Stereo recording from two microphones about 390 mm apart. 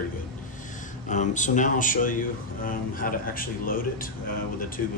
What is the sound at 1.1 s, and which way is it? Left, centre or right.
Speech, centre.